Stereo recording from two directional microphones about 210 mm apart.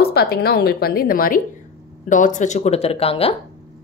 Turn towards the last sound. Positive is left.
turn(degrees=25)  # may be behind; listen again after turning